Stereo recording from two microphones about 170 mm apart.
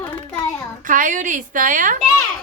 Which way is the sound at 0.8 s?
50° right (ahead or behind).